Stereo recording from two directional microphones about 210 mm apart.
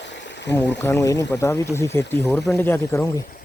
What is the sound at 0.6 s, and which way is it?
Speech, 10° left (ahead or behind).